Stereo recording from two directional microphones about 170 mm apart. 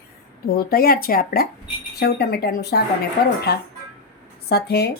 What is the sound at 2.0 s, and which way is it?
Speech, 75° left (ahead or behind).